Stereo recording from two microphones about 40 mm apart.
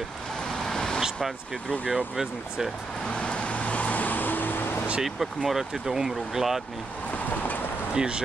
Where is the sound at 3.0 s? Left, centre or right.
Left.